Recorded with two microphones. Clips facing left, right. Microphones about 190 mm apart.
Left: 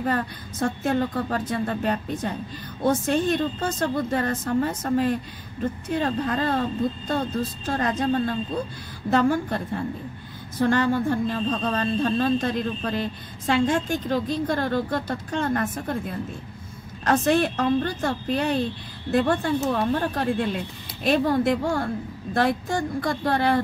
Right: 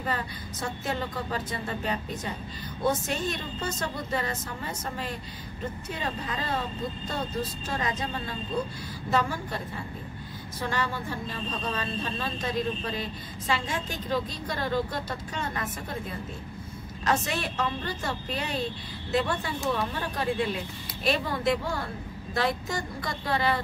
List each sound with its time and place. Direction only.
0.0 s a woman's voice: 50° left (ahead or behind)
17.0 s a woman's voice: 55° left (ahead or behind)